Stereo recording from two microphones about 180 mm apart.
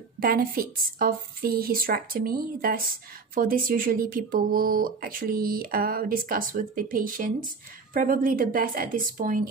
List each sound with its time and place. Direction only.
0.2 s speech: 55° right (ahead or behind)